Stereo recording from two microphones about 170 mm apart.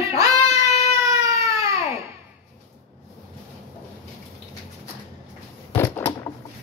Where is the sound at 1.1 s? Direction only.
20° right (ahead or behind).